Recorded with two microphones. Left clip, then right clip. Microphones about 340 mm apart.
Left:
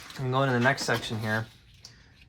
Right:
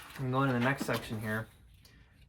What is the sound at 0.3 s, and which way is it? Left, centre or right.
Speech, centre.